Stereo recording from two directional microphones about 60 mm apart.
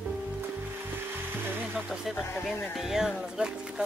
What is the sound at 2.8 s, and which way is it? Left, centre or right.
Speech, centre.